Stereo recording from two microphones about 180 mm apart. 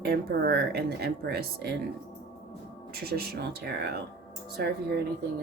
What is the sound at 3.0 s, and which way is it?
Speech, 60° right (ahead or behind).